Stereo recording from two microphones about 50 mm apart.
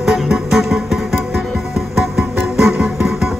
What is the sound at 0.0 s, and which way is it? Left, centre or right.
Music, centre.